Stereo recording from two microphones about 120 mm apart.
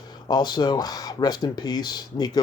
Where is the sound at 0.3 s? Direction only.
35° left (ahead or behind).